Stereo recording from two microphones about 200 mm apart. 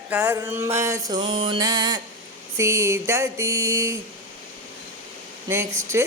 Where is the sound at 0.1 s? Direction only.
10° right (ahead or behind).